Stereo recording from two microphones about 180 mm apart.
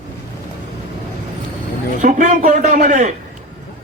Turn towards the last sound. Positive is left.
turn(degrees=-45)  # may be behind; listen again after turning